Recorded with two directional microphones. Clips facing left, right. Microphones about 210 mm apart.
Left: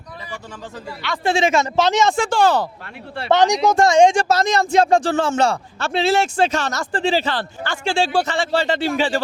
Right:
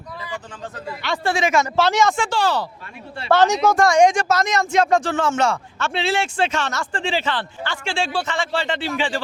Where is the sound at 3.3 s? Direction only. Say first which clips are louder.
Left 1 dB; 15° left (ahead or behind).